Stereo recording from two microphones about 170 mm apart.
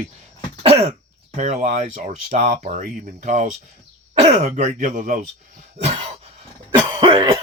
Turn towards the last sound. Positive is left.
turn(degrees=-25)  # may be behind; listen again after turning